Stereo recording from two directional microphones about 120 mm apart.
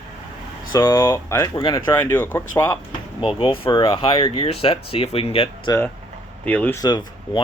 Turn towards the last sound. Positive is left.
turn(degrees=35)  # may be behind; listen again after turning